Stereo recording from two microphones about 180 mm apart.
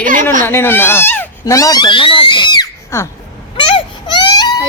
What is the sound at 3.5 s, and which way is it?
Baby cry, 25° left (ahead or behind).